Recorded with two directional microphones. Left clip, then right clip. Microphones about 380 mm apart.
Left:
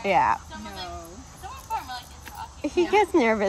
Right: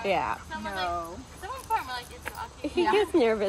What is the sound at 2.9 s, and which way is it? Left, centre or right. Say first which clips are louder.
Speech: left 2 dB; centre.